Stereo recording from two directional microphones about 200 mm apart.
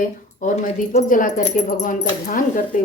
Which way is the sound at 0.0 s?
35° left (ahead or behind).